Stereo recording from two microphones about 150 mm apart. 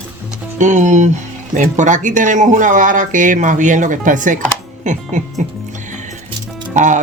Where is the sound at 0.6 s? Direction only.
55° right (ahead or behind).